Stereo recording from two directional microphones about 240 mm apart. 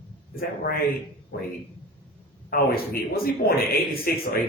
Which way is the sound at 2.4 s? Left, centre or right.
Left.